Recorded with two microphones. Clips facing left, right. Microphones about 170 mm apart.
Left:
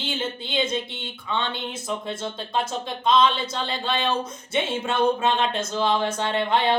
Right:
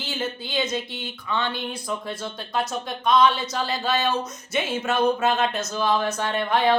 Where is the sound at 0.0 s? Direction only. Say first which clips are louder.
Even; 25° left (ahead or behind).